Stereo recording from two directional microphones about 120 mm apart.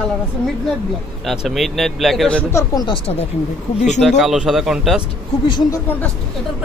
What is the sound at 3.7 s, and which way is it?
Speech, 75° left (ahead or behind).